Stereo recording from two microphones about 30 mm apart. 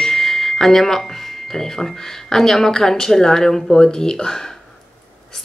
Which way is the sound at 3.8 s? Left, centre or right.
Left.